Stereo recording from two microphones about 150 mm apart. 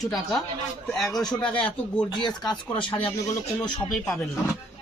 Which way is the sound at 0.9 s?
Centre (ahead or behind).